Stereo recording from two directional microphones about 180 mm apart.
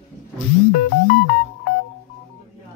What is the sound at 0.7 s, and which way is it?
Music, 55° left (ahead or behind).